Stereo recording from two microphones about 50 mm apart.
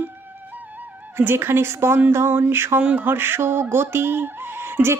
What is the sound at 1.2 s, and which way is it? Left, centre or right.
Speech, right.